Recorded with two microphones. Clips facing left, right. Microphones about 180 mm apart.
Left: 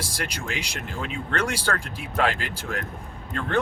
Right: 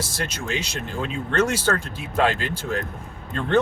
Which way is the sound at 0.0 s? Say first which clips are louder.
Right 3 dB; 25° right (ahead or behind).